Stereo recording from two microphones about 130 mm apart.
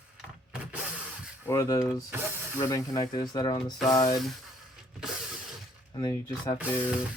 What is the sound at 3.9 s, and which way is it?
Speech, 30° left (ahead or behind).